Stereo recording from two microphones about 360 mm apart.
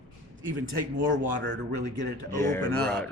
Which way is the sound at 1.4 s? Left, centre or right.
Right.